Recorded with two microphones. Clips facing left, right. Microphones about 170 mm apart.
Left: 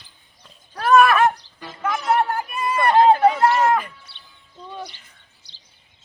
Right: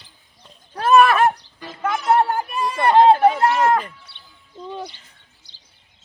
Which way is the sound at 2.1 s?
40° right (ahead or behind).